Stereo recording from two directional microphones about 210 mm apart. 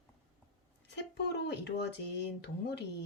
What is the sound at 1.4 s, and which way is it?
Speech, 55° left (ahead or behind).